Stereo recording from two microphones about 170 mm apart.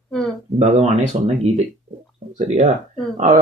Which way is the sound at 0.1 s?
Centre (ahead or behind).